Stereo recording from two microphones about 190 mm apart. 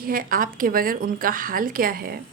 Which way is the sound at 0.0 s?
50° right (ahead or behind).